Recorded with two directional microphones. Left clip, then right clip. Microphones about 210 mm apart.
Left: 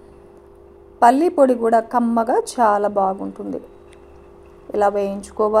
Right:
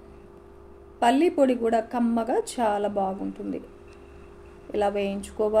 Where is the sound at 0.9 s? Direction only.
25° left (ahead or behind).